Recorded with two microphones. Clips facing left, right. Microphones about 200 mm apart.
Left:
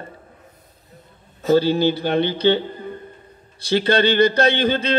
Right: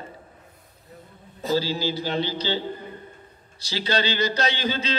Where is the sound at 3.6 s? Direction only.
55° left (ahead or behind).